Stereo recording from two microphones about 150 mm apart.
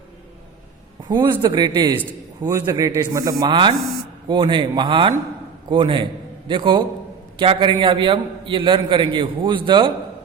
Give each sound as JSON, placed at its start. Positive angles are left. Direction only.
{"t": 1.0, "sound": "a man's voice", "side_deg": -30}